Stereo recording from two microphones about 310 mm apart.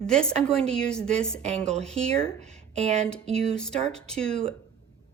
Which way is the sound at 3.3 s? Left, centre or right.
Centre.